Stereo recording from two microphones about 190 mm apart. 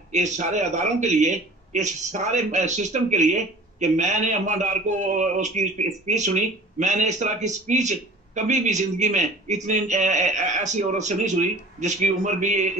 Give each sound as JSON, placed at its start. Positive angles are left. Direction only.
{"t": 0.1, "sound": "speech", "side_deg": -40}